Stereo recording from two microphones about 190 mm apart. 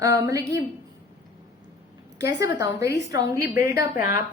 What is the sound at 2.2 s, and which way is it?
A woman's voice, 15° right (ahead or behind).